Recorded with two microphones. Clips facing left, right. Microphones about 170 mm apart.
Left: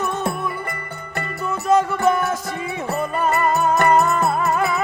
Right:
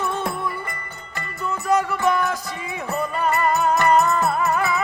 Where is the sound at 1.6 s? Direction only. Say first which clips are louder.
Left 3 dB; 25° left (ahead or behind).